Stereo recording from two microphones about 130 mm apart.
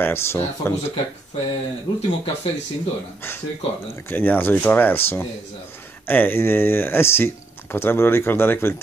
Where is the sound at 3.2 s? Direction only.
15° left (ahead or behind).